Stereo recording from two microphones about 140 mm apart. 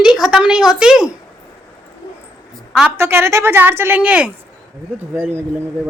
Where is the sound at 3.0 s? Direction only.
20° right (ahead or behind).